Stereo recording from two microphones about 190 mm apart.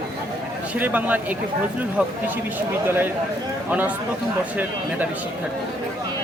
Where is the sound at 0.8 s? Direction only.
10° right (ahead or behind).